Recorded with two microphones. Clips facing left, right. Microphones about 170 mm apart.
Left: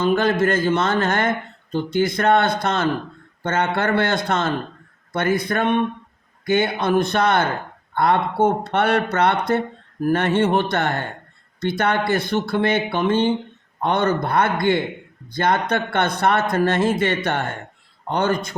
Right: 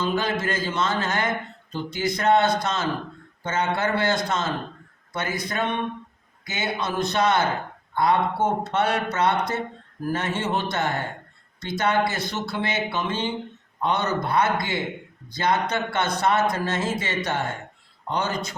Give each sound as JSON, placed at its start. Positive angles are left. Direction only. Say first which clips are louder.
{"t": 0.0, "sound": "speech", "louder": "left 7 dB", "side_deg": 55}